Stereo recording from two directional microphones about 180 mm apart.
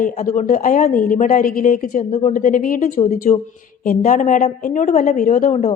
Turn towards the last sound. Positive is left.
turn(degrees=45)  # may be behind; listen again after turning